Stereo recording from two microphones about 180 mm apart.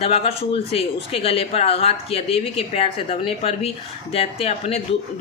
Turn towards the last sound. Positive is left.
turn(degrees=35)  # may be behind; listen again after turning